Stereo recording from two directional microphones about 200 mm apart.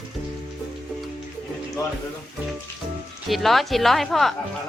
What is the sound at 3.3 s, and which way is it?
A woman's voice, centre (ahead or behind).